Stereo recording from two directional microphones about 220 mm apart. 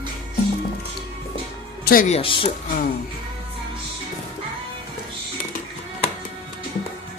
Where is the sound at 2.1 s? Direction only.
25° left (ahead or behind).